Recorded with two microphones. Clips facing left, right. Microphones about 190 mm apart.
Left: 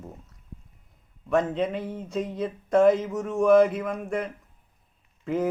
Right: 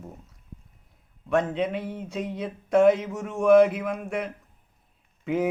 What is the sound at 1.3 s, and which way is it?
A man's voice, centre (ahead or behind).